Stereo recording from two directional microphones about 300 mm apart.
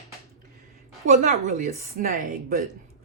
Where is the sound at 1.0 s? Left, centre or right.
Right.